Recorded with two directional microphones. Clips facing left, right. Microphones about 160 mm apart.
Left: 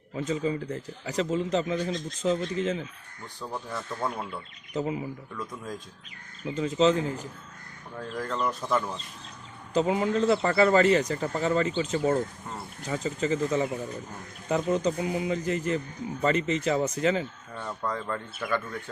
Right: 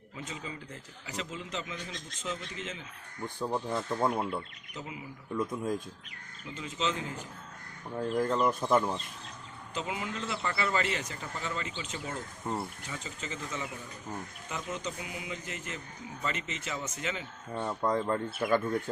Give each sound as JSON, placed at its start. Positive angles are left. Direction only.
{"t": 0.2, "sound": "a man's voice", "side_deg": 40}
{"t": 3.4, "sound": "speech", "side_deg": -20}
{"t": 4.1, "sound": "speech", "side_deg": -5}
{"t": 4.7, "sound": "a man's voice", "side_deg": 40}
{"t": 5.3, "sound": "speech", "side_deg": -20}
{"t": 6.4, "sound": "a man's voice", "side_deg": 40}
{"t": 7.9, "sound": "speech", "side_deg": -20}
{"t": 9.7, "sound": "a man's voice", "side_deg": 40}
{"t": 12.4, "sound": "speech", "side_deg": -30}
{"t": 12.9, "sound": "a man's voice", "side_deg": 40}
{"t": 17.5, "sound": "speech", "side_deg": -20}
{"t": 18.3, "sound": "speech", "side_deg": -45}